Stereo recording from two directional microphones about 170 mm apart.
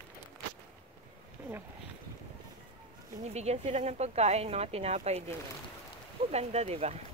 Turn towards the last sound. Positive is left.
turn(degrees=-40)  # may be behind; listen again after turning